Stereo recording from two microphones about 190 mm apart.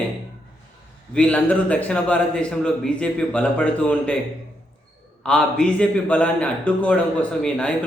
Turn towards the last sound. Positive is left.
turn(degrees=5)  # may be behind; listen again after turning